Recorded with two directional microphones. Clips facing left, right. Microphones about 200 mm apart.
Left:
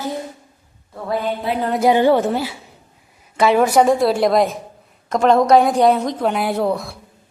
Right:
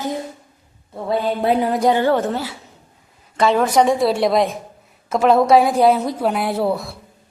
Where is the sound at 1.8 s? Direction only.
15° left (ahead or behind); by 6.9 s centre (ahead or behind).